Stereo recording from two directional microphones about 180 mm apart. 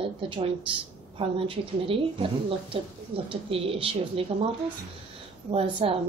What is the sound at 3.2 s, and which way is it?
A woman's voice, 30° right (ahead or behind).